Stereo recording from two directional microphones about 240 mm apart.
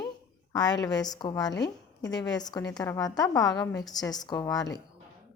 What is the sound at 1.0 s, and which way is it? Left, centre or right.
Speech, centre.